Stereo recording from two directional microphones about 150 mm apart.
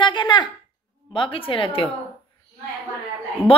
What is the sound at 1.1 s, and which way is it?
Speech, 35° left (ahead or behind).